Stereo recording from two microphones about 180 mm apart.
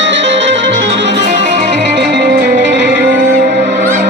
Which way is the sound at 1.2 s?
45° right (ahead or behind).